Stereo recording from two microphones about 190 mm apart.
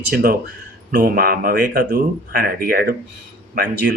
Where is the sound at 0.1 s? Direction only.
55° right (ahead or behind).